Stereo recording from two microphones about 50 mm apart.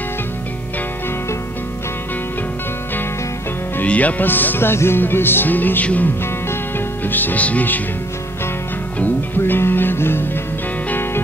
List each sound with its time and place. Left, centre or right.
3.8 s speech: left
4.2 s music: left
7.1 s speech: left
9.0 s music: left